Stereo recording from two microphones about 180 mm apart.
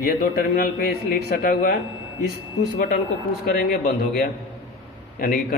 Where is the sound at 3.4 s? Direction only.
60° left (ahead or behind).